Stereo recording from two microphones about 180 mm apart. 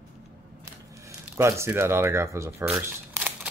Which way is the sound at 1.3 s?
15° right (ahead or behind).